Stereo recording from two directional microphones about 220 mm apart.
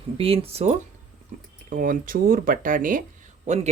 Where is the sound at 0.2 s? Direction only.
25° right (ahead or behind).